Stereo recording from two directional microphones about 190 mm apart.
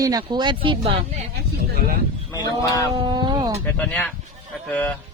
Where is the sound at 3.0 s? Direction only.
25° right (ahead or behind).